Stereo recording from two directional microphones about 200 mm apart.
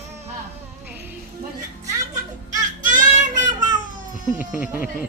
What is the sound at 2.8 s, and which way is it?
Child singing, 40° right (ahead or behind).